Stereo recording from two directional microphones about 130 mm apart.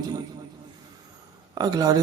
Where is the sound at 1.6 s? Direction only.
30° right (ahead or behind).